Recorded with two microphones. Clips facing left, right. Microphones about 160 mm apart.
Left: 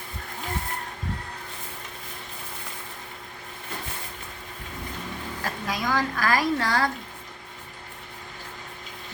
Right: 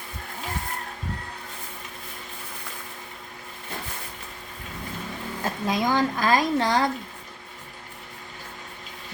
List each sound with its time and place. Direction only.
5.4 s speech: 25° right (ahead or behind)